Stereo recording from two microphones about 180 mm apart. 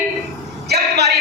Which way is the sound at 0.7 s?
65° right (ahead or behind).